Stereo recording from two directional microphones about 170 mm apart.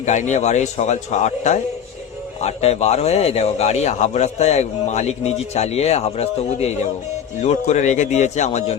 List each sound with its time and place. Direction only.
0.0 s a man's voice: 45° left (ahead or behind)